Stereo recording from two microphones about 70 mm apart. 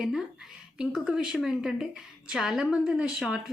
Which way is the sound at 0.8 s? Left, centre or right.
Centre.